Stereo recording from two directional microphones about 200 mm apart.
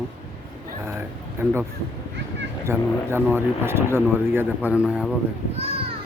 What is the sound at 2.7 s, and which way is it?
Speech, 10° right (ahead or behind).